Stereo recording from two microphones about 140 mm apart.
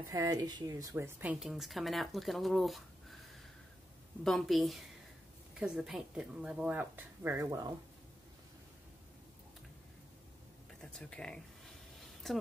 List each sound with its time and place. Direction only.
0.1 s speech: 25° right (ahead or behind); by 3.2 s centre (ahead or behind)
4.2 s speech: centre (ahead or behind); by 7.4 s 15° right (ahead or behind)
7.4 s speech: 25° right (ahead or behind)
10.8 s a sound: 5° left (ahead or behind)